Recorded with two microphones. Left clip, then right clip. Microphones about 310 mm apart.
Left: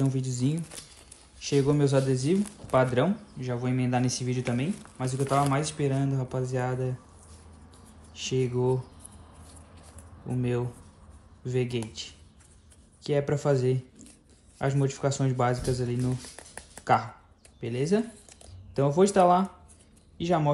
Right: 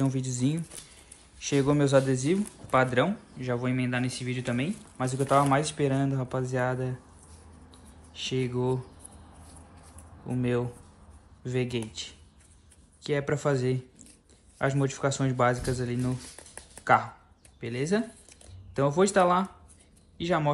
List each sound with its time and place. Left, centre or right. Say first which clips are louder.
0.0 s speech: right 1 dB; centre
8.1 s speech: left 2 dB; centre
10.2 s speech: right 2 dB; centre